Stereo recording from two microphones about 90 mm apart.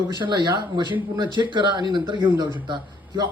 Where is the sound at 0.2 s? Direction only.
55° right (ahead or behind).